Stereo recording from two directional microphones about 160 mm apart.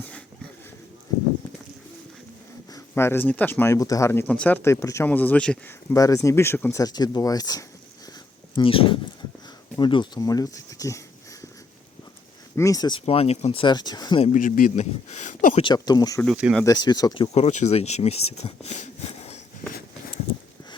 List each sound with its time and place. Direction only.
2.7 s speech: 15° left (ahead or behind)
5.9 s speech: 20° left (ahead or behind)
8.5 s speech: 35° left (ahead or behind)
12.5 s speech: 20° left (ahead or behind)
13.1 s speech: 40° left (ahead or behind)
14.3 s speech: 55° left (ahead or behind)
15.5 s speech: 30° left (ahead or behind)
16.2 s speech: 5° right (ahead or behind)
16.6 s speech: 25° left (ahead or behind)
17.3 s speech: 45° left (ahead or behind)